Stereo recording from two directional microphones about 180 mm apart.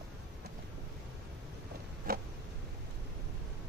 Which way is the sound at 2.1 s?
55° right (ahead or behind).